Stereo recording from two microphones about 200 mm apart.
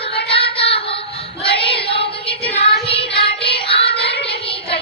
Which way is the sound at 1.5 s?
30° left (ahead or behind).